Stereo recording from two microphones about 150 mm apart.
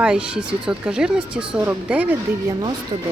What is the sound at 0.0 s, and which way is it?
Speech, 5° right (ahead or behind).